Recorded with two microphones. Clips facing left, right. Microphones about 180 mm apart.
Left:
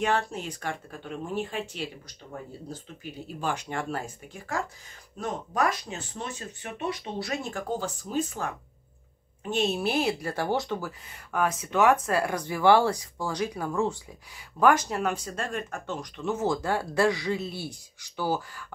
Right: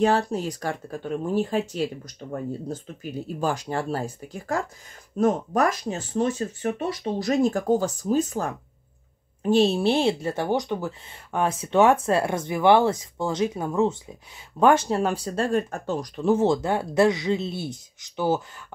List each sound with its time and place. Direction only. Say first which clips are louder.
0.0 s speech: right 6 dB; 35° right (ahead or behind)